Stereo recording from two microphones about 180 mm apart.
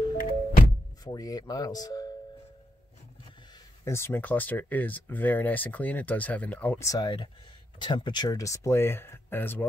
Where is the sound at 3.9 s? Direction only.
15° left (ahead or behind).